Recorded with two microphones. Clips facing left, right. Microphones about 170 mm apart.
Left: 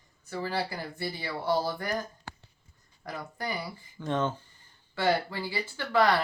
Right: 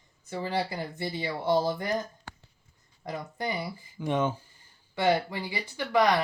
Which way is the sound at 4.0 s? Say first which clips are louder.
Right 2 dB; 10° right (ahead or behind).